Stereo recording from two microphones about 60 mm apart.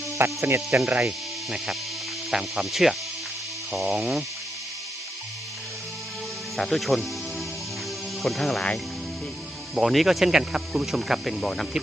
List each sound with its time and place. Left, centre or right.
0.2 s speech: right
0.8 s speech: centre
3.9 s speech: centre
6.6 s speech: centre
8.2 s speech: centre
9.7 s speech: centre